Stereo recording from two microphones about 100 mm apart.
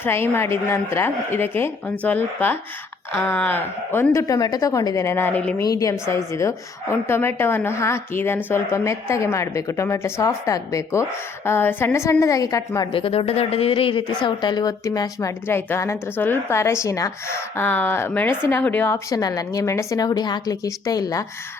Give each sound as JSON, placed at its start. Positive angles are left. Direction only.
{"t": 0.0, "sound": "a woman's voice", "side_deg": 25}
{"t": 5.6, "sound": "a woman's voice", "side_deg": 35}
{"t": 11.4, "sound": "a woman's voice", "side_deg": 20}
{"t": 12.9, "sound": "speech", "side_deg": 65}
{"t": 15.4, "sound": "a woman's voice", "side_deg": 25}
{"t": 19.1, "sound": "a woman's voice", "side_deg": 40}